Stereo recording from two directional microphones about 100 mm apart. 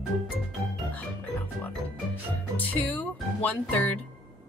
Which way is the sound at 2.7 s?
15° left (ahead or behind).